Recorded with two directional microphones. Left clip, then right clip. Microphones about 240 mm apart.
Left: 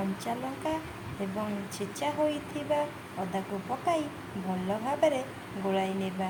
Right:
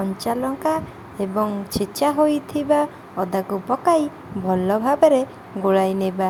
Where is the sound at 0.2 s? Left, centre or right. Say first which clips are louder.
Right 11 dB; right.